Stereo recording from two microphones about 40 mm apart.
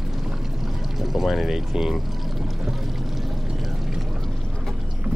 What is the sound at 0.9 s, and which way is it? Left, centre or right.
Speech, centre.